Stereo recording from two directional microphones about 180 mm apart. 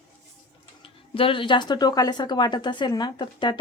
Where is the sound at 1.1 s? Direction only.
30° left (ahead or behind).